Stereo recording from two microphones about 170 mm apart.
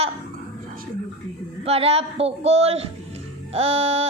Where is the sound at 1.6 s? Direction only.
35° right (ahead or behind).